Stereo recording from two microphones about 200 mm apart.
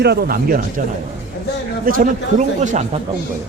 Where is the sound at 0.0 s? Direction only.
55° right (ahead or behind).